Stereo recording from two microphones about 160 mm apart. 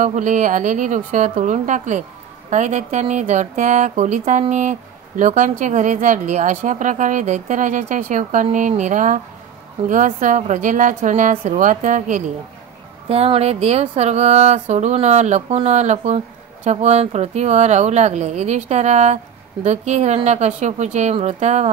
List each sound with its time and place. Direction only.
0.0 s speech: 50° right (ahead or behind)
13.1 s speech: 40° right (ahead or behind)